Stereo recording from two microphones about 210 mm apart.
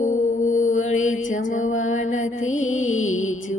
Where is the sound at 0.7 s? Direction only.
70° left (ahead or behind).